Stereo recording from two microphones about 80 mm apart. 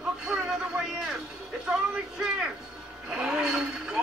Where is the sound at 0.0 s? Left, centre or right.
Centre.